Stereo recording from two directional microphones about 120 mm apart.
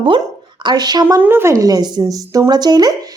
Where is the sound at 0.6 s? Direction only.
35° right (ahead or behind).